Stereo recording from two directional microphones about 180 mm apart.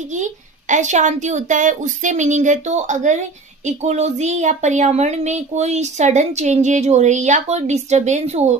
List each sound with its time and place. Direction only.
0.1 s a woman's voice: 45° right (ahead or behind)